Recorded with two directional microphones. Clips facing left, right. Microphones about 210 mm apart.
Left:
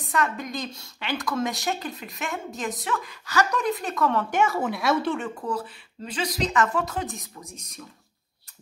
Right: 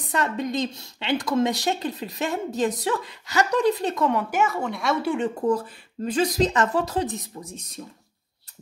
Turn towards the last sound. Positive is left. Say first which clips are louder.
# right 2 dB
turn(degrees=-35)  # may be behind; listen again after turning